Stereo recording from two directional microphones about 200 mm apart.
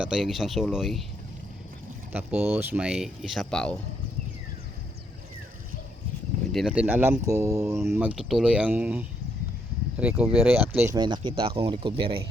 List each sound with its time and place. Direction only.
0.0 s speech: centre (ahead or behind)
2.1 s speech: 10° right (ahead or behind)
6.5 s speech: centre (ahead or behind)
7.8 s speech: 5° right (ahead or behind); by 12.1 s 25° right (ahead or behind)